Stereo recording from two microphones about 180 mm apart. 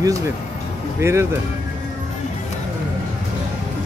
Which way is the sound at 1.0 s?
15° right (ahead or behind).